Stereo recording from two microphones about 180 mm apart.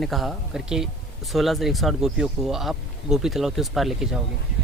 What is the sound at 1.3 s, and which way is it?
Speech, centre (ahead or behind).